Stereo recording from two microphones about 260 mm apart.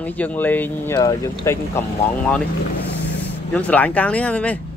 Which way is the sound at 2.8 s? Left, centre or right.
Left.